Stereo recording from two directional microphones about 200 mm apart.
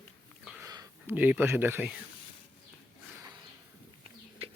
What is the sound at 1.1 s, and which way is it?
Speech, 10° right (ahead or behind).